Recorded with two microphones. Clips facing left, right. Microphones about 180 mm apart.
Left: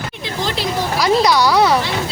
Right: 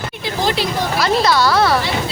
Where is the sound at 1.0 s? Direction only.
15° left (ahead or behind).